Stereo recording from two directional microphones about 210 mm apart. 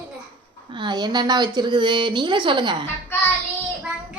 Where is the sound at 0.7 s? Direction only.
20° right (ahead or behind).